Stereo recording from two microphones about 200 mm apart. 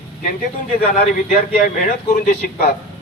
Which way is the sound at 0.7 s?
40° left (ahead or behind).